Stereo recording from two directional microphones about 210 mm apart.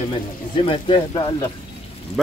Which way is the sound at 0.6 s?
25° left (ahead or behind).